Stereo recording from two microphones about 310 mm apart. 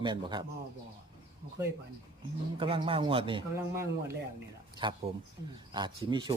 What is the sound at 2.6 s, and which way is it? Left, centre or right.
Speech, centre.